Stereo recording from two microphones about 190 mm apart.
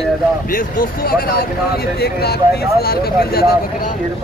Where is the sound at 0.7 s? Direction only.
50° left (ahead or behind).